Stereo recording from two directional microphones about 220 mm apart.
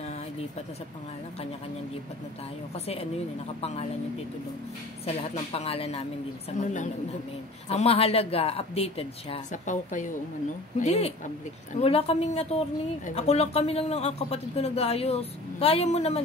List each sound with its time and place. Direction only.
2.7 s speech: 25° left (ahead or behind)
5.0 s a woman's voice: 30° left (ahead or behind)